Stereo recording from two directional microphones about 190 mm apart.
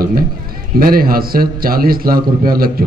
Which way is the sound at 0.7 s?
50° right (ahead or behind).